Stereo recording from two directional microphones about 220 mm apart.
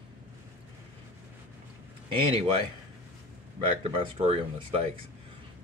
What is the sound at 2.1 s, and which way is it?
Speech, 25° right (ahead or behind).